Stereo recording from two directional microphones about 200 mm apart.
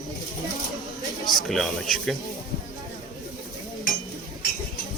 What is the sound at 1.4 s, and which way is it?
Speech, centre (ahead or behind).